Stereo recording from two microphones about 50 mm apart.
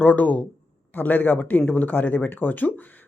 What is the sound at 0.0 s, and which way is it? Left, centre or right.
Speech, left.